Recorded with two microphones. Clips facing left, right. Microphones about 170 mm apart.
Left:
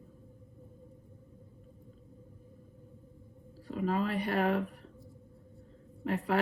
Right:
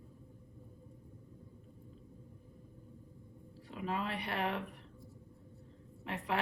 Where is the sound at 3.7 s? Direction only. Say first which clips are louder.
Left 7 dB; 40° left (ahead or behind).